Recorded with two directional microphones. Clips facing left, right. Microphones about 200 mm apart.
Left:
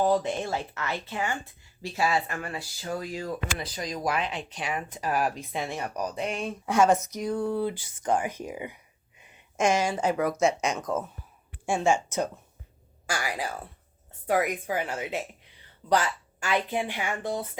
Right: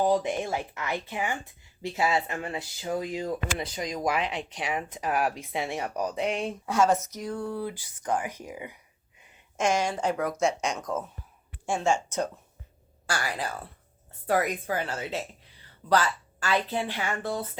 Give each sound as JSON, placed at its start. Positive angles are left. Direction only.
{"t": 0.0, "sound": "a woman's voice", "side_deg": -15}
{"t": 6.7, "sound": "speech", "side_deg": 15}
{"t": 9.6, "sound": "a woman's voice", "side_deg": 5}